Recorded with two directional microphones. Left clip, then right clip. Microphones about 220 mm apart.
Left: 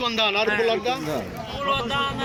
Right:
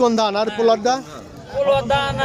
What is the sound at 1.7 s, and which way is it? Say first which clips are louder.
Speech: right 6 dB; 45° right (ahead or behind).